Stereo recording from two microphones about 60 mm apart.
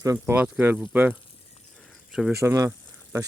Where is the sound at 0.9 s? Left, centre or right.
Right.